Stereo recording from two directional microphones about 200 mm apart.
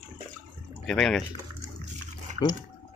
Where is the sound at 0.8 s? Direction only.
Centre (ahead or behind).